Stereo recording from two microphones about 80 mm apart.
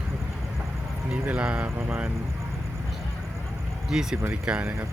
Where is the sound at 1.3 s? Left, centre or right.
Centre.